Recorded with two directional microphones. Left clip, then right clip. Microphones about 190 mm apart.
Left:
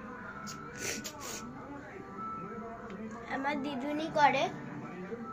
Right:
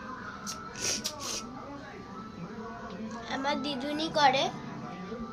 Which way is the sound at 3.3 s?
5° right (ahead or behind).